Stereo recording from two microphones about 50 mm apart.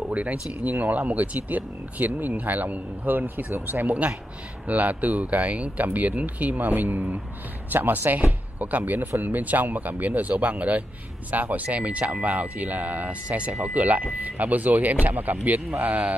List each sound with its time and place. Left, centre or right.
0.1 s speech: right